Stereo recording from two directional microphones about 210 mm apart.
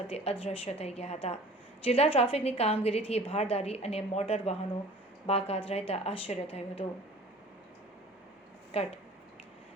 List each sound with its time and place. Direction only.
0.1 s a woman's voice: 30° left (ahead or behind)
8.7 s a woman's voice: 30° left (ahead or behind)